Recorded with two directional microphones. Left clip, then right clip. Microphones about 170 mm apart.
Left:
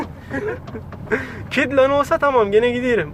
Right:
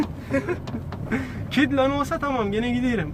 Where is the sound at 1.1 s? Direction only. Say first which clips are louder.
Left 5 dB; 50° left (ahead or behind).